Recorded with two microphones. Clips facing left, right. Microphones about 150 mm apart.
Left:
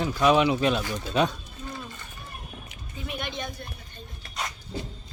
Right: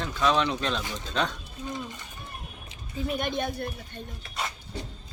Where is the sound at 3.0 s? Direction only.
45° right (ahead or behind).